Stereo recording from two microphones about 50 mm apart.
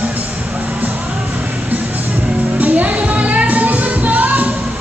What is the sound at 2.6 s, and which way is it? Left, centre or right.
Music, right.